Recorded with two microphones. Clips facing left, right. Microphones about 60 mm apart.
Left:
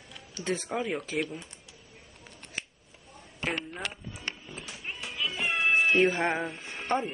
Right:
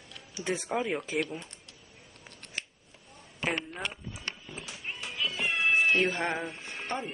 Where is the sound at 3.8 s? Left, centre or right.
Left.